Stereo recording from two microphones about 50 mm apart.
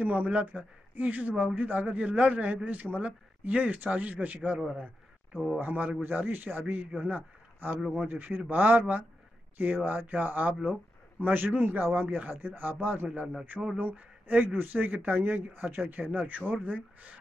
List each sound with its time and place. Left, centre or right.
0.0 s a man's voice: right
5.6 s a man's voice: right
13.0 s a man's voice: right
13.7 s a man's voice: right